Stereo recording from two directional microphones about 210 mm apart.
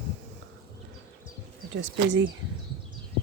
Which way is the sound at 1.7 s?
65° right (ahead or behind).